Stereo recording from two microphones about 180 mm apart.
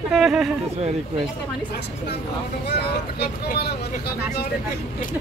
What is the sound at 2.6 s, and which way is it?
Speech, 60° left (ahead or behind).